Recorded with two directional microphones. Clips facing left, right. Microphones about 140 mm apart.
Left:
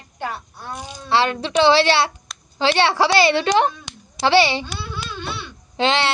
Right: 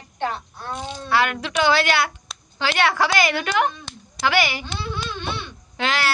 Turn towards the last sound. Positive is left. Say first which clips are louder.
# left 4 dB
turn(degrees=25)  # may be behind; listen again after turning